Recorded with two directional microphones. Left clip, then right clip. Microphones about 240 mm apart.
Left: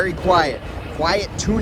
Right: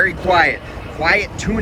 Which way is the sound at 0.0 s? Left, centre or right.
Centre.